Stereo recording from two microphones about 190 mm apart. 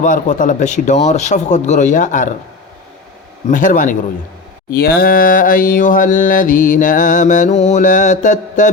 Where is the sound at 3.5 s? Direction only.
45° left (ahead or behind).